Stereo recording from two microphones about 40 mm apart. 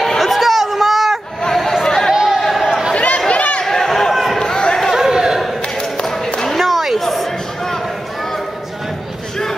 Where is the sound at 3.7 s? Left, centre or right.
Centre.